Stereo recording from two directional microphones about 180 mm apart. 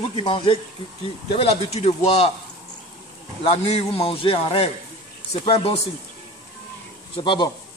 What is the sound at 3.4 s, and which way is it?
A man's voice, 35° left (ahead or behind).